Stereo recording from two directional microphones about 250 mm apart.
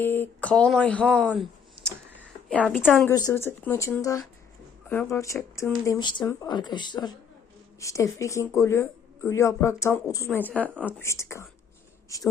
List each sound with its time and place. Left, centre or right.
0.0 s a woman's voice: centre